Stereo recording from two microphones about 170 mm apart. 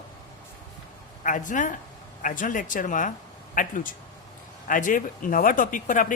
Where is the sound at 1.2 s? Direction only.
50° left (ahead or behind).